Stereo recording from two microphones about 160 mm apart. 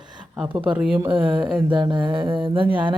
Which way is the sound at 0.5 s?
30° right (ahead or behind).